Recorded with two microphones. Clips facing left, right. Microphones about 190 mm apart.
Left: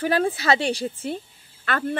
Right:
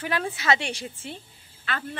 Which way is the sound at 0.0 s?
35° left (ahead or behind).